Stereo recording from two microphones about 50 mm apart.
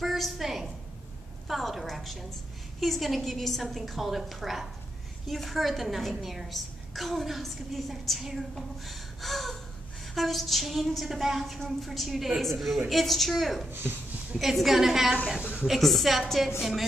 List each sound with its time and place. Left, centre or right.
0.0 s a sound: centre
1.5 s a woman's voice: centre
8.5 s gasp: centre
10.1 s a woman's voice: centre
13.7 s speech: right
14.3 s a woman's voice: centre